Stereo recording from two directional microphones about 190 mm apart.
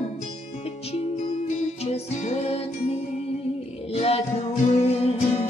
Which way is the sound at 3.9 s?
35° left (ahead or behind).